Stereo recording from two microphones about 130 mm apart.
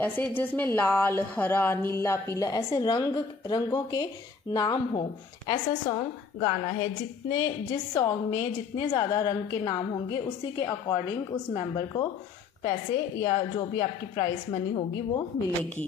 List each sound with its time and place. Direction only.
0.0 s a woman's voice: 15° left (ahead or behind); by 12.1 s 30° left (ahead or behind)
13.2 s a woman's voice: 30° left (ahead or behind)